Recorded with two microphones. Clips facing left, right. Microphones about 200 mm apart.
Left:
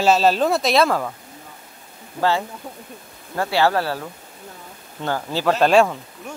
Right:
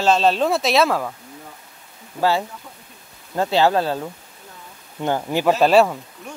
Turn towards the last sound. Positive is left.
turn(degrees=-5)  # may be behind; listen again after turning